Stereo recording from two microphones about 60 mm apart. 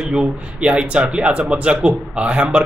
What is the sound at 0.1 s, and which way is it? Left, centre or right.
A man's voice, centre.